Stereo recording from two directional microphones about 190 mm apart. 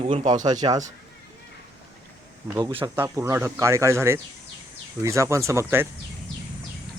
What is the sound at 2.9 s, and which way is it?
Speech, 15° right (ahead or behind).